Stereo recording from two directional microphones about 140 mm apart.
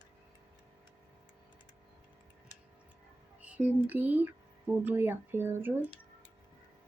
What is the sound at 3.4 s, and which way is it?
Speech, 10° right (ahead or behind).